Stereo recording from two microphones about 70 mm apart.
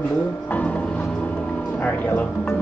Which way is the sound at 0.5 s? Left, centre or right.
Left.